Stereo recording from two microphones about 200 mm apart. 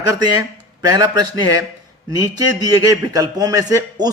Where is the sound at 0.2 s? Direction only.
20° right (ahead or behind).